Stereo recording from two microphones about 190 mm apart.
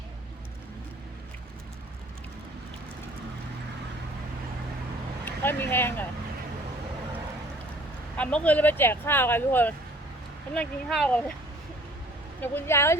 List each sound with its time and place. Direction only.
5.2 s speech: 10° left (ahead or behind)
8.1 s speech: 5° left (ahead or behind)
12.4 s speech: 10° left (ahead or behind)